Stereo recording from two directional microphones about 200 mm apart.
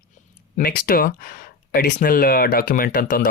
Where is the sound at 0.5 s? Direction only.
45° left (ahead or behind).